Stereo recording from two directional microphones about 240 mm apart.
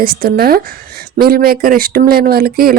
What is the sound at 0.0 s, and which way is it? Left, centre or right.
Speech, right.